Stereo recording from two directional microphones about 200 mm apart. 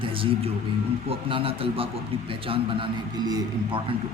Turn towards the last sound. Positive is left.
turn(degrees=-20)  # may be behind; listen again after turning